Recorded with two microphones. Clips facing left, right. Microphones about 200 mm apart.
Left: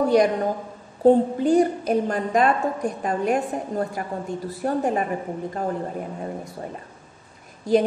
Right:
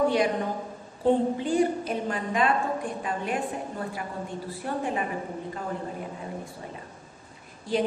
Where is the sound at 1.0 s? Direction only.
40° left (ahead or behind).